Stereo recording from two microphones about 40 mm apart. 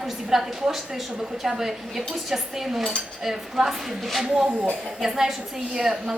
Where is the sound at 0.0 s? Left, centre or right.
Centre.